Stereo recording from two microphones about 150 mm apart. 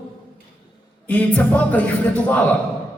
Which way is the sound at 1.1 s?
10° left (ahead or behind).